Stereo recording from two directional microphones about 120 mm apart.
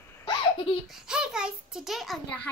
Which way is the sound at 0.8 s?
5° right (ahead or behind).